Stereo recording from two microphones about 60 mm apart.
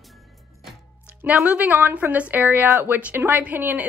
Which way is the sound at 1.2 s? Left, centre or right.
Right.